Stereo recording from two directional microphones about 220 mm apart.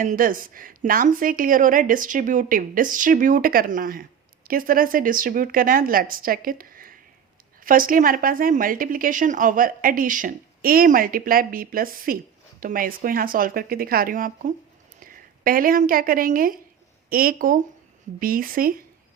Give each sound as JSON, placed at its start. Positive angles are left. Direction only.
{"t": 0.0, "sound": "speech", "side_deg": -40}